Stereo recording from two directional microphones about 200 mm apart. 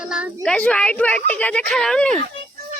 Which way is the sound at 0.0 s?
5° right (ahead or behind).